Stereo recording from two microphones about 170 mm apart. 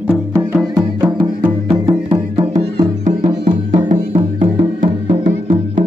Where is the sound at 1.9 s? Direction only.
30° right (ahead or behind).